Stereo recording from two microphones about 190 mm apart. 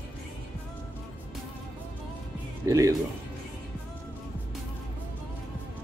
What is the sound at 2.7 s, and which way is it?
Speech, 20° right (ahead or behind).